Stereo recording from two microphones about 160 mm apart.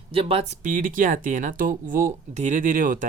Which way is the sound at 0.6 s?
55° right (ahead or behind).